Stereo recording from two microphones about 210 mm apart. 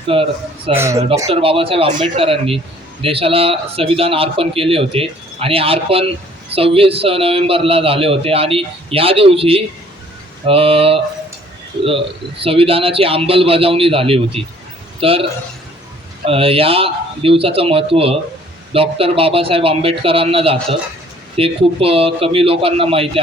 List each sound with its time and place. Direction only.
0.1 s a man's voice: 25° right (ahead or behind)
0.7 s speech: 10° right (ahead or behind)
1.3 s a man's voice: 25° right (ahead or behind)